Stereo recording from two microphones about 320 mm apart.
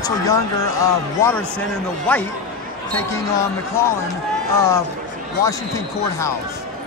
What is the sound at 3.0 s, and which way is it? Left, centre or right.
Speech, centre.